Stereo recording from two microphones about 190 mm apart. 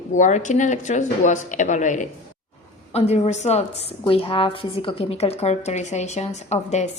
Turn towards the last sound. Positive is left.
turn(degrees=35)  # may be behind; listen again after turning